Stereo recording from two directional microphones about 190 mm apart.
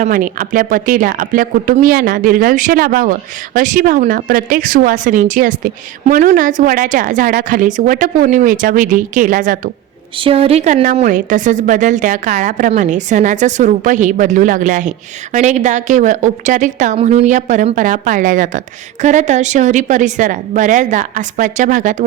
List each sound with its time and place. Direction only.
0.0 s speech: 45° right (ahead or behind)
10.2 s a woman's voice: 30° right (ahead or behind)